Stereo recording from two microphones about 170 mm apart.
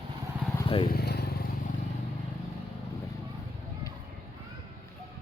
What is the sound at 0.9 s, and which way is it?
Vehicle, 70° left (ahead or behind).